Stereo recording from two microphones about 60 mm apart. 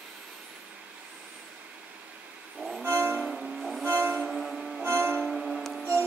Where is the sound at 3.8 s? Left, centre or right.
Right.